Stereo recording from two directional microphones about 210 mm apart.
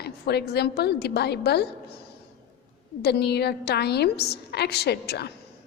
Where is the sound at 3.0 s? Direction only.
50° left (ahead or behind).